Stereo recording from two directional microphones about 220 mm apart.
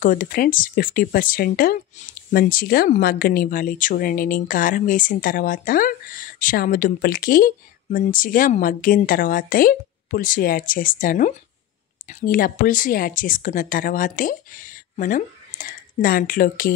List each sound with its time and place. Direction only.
0.0 s speech: 40° left (ahead or behind)